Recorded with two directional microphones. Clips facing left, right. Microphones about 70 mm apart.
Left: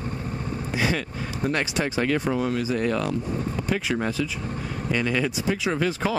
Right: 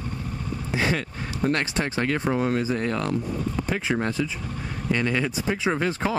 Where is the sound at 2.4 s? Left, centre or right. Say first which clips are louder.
Right 1 dB; right.